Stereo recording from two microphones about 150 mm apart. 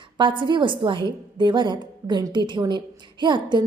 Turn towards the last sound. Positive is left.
turn(degrees=-30)  # may be behind; listen again after turning